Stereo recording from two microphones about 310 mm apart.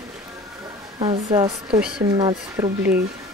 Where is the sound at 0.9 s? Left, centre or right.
Centre.